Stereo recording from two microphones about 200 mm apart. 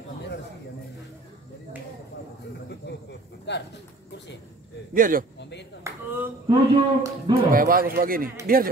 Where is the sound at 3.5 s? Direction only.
60° left (ahead or behind).